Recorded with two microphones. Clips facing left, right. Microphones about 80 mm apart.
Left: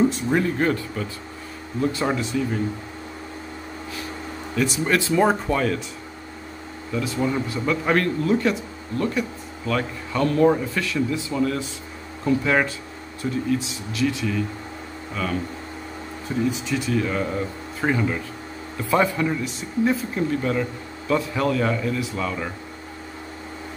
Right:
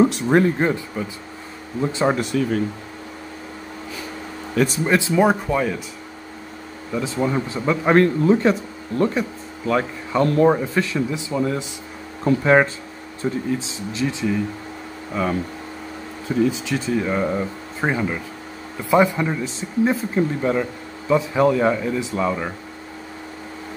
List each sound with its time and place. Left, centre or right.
0.6 s speech: centre
2.1 s speech: right
4.6 s speech: right
4.8 s speech: centre
5.1 s speech: centre
6.9 s speech: right
12.3 s speech: right
16.9 s speech: right